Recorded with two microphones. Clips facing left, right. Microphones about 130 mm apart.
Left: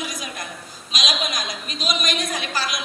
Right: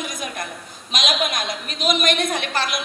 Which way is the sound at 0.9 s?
55° right (ahead or behind).